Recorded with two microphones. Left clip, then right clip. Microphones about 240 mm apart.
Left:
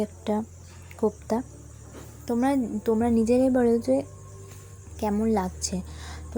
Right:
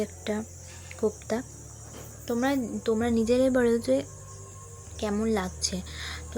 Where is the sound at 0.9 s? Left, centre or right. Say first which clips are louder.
Left 2 dB; centre.